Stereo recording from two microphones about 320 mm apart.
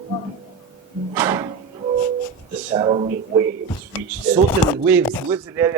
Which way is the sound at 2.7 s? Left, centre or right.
Centre.